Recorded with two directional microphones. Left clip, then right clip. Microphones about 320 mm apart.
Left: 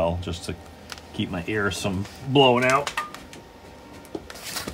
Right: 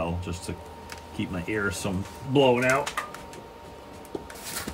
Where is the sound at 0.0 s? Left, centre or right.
Left.